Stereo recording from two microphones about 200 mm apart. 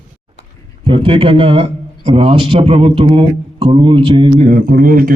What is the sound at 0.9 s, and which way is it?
A man's voice, 25° right (ahead or behind).